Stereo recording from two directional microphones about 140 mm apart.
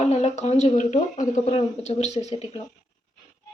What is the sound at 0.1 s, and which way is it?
A woman's voice, 50° left (ahead or behind).